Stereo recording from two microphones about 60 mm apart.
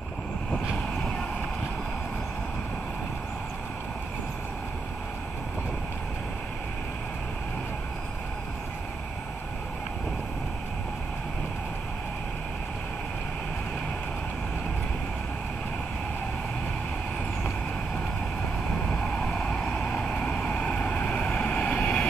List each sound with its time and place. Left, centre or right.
18.9 s vehicle: left